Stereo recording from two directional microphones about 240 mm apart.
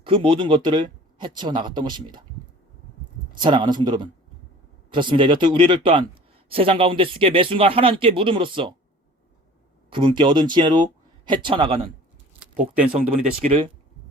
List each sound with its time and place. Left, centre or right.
0.0 s speech: right
3.3 s speech: centre
9.9 s speech: centre
13.4 s speech: right